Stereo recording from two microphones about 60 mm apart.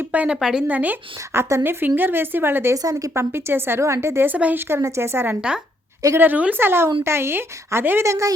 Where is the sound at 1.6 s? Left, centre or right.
Right.